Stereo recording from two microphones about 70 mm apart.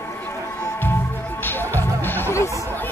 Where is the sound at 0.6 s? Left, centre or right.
Left.